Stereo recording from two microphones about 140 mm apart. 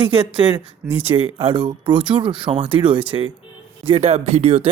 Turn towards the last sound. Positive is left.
turn(degrees=-45)  # may be behind; listen again after turning